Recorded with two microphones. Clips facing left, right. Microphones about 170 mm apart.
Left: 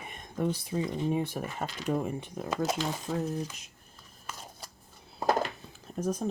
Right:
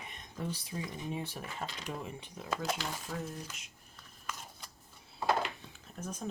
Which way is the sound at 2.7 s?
20° left (ahead or behind).